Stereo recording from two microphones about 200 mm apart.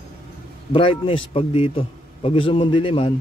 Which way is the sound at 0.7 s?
25° left (ahead or behind).